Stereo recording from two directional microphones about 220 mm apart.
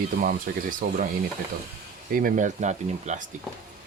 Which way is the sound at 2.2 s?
35° right (ahead or behind).